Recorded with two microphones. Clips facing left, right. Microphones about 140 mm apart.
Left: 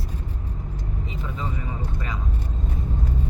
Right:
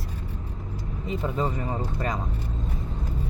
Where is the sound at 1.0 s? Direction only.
45° right (ahead or behind).